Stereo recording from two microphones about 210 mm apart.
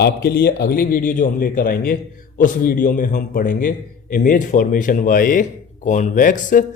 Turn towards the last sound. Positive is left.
turn(degrees=40)  # may be behind; listen again after turning